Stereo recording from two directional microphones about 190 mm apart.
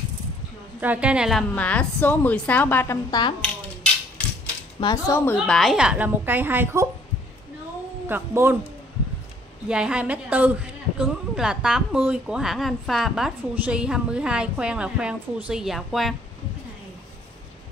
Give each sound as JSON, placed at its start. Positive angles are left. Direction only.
{"t": 0.7, "sound": "a woman's voice", "side_deg": -10}
{"t": 1.5, "sound": "a woman's voice", "side_deg": 5}
{"t": 4.7, "sound": "a woman's voice", "side_deg": 20}
{"t": 8.1, "sound": "a woman's voice", "side_deg": -10}
{"t": 9.7, "sound": "a woman's voice", "side_deg": -5}